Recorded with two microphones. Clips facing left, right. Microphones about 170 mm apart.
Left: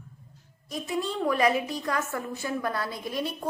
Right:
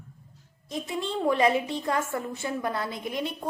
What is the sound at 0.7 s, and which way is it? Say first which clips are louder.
A woman's voice: even; 25° right (ahead or behind).